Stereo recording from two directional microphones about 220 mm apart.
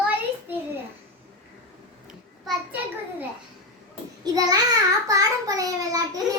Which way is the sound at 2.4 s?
5° right (ahead or behind).